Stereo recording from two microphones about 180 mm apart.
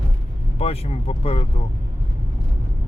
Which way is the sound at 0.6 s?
35° left (ahead or behind).